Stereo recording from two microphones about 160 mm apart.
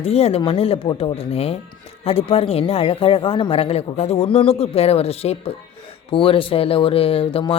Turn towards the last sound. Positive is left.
turn(degrees=35)  # may be behind; listen again after turning